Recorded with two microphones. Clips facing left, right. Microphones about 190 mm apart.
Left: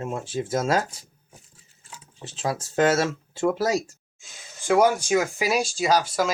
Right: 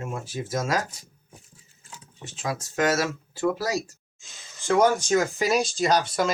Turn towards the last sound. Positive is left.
turn(degrees=5)  # may be behind; listen again after turning